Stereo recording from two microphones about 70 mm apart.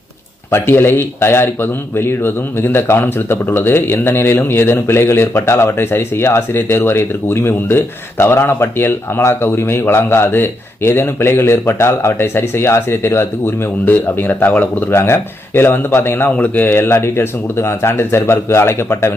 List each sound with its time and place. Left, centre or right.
0.5 s speech: left
16.3 s speech: left